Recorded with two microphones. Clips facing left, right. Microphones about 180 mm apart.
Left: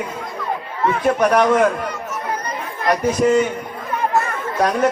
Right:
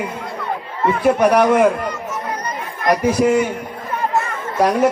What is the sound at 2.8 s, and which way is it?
Speech, 10° right (ahead or behind).